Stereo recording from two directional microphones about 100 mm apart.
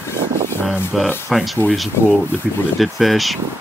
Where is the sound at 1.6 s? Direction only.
20° left (ahead or behind).